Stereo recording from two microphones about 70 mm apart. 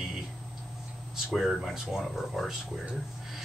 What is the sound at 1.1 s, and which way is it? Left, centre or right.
Speech, centre.